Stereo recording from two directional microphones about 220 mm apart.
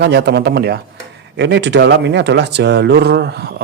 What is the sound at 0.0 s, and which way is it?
Speech, 50° right (ahead or behind).